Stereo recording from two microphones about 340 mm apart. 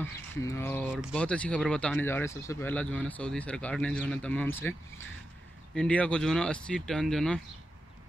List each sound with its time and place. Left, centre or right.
0.0 s speech: centre